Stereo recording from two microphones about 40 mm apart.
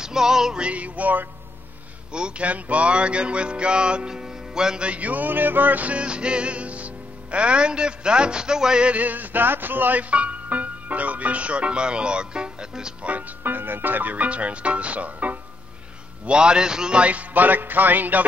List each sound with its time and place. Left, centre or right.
0.0 s music: centre
0.6 s speech: right
2.1 s music: right
2.4 s music: right; by 4.8 s centre
4.8 s music: right; by 8.8 s centre
8.8 s speech: right
13.4 s speech: right
16.3 s music: right
17.0 s music: right